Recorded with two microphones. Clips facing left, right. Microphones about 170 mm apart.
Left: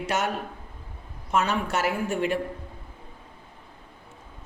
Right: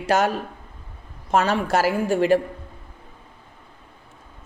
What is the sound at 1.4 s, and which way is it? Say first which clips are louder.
Speech: right 5 dB; 90° right.